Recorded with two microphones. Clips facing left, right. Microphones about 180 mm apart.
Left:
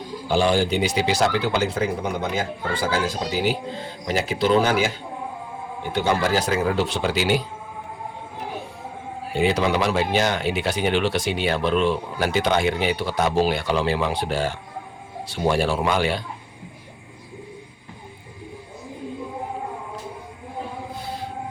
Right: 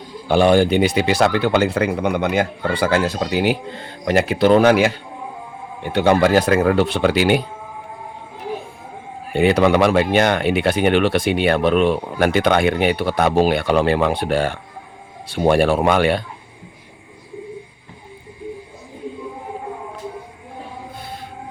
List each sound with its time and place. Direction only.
0.3 s speech: 60° right (ahead or behind)
9.3 s speech: 60° right (ahead or behind)